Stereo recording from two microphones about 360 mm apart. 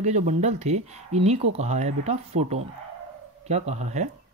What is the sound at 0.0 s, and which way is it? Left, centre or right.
Speech, centre.